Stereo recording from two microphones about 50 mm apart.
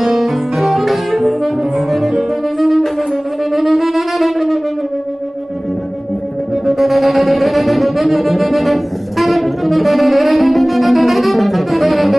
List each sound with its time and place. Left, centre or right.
0.0 s saxophone: centre
3.5 s wind instrument: centre
6.6 s music: centre